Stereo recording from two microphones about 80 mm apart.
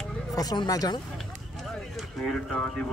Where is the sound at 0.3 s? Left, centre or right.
Left.